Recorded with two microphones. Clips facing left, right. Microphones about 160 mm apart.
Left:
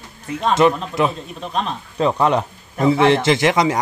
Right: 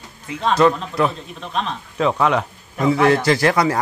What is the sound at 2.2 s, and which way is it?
Speech, 35° left (ahead or behind).